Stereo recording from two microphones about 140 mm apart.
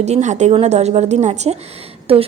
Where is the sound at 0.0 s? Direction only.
55° right (ahead or behind).